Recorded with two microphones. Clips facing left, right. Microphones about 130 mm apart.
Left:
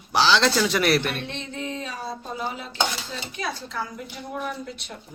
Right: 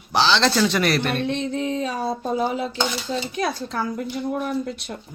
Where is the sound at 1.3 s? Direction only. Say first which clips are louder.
Right 8 dB; 40° right (ahead or behind).